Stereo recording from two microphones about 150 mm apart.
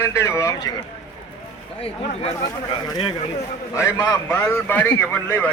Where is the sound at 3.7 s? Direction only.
20° left (ahead or behind).